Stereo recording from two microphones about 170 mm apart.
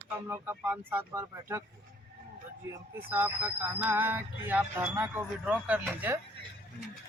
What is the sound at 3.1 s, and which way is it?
Speech, 10° right (ahead or behind).